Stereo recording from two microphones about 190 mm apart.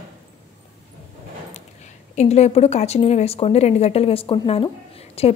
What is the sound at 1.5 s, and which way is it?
A woman's voice, 35° left (ahead or behind).